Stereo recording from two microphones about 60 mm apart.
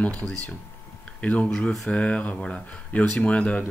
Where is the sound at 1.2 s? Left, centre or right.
Left.